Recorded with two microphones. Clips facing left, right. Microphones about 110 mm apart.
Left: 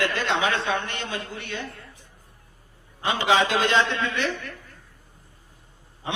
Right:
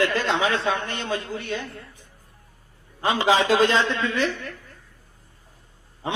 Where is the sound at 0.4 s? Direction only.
35° right (ahead or behind).